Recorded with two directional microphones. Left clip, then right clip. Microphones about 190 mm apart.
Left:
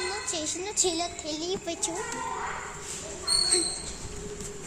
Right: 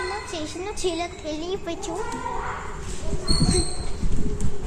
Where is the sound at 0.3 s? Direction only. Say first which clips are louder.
Even; 10° left (ahead or behind).